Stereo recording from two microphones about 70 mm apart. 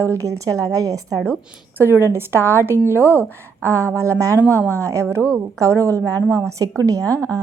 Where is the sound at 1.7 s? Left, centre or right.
Right.